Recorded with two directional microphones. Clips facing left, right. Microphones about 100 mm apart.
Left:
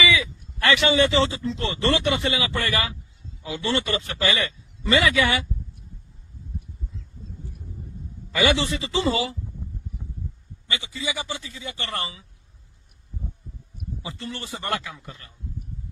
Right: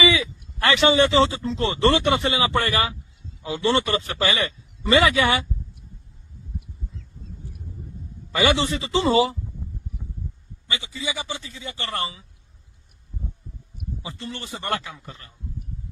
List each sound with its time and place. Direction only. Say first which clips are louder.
0.0 s a sound: right 2 dB; 30° right (ahead or behind)
1.4 s speech: right 1 dB; 40° right (ahead or behind)
1.6 s speech: right 4 dB; 30° right (ahead or behind)
8.3 s speech: right 1 dB; 30° right (ahead or behind)
11.5 s speech: even; centre (ahead or behind)
11.8 s speech: right 3 dB; 25° right (ahead or behind)
14.0 s speech: left 1 dB; 25° right (ahead or behind)